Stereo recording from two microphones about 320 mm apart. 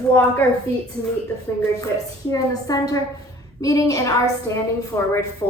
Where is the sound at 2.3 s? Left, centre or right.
Centre.